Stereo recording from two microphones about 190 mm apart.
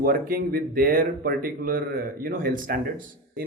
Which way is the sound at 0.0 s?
50° right (ahead or behind).